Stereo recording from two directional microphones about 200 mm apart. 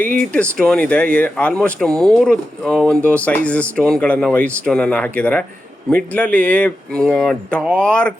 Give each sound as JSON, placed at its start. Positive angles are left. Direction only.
{"t": 0.0, "sound": "speech", "side_deg": -45}
{"t": 0.6, "sound": "speech", "side_deg": 5}